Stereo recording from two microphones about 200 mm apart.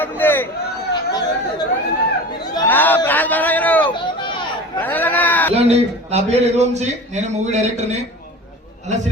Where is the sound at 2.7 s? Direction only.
10° left (ahead or behind).